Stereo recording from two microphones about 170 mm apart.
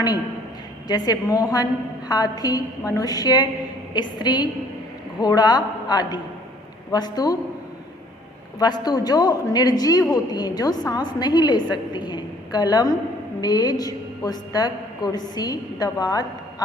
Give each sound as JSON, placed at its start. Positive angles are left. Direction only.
{"t": 0.9, "sound": "a woman's voice", "side_deg": 25}
{"t": 8.5, "sound": "a woman's voice", "side_deg": 25}